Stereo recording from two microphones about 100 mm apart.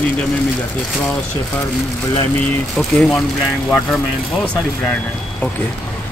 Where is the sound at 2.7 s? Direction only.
Centre (ahead or behind).